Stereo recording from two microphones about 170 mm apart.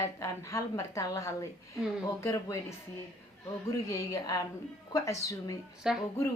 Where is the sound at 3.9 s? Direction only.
20° left (ahead or behind).